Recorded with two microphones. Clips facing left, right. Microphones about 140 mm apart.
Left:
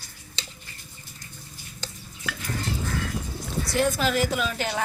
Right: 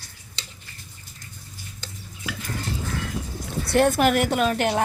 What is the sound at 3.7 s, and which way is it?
A woman's voice, 60° right (ahead or behind).